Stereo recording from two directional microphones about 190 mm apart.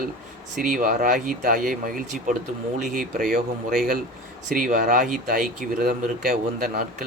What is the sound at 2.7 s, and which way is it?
Speech, 45° right (ahead or behind).